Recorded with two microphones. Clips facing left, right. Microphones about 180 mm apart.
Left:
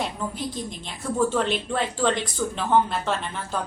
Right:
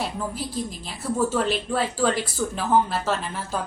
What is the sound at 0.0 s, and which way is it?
Speech, 5° right (ahead or behind).